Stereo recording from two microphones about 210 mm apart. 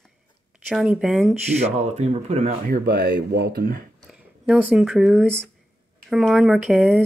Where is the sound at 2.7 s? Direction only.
50° right (ahead or behind).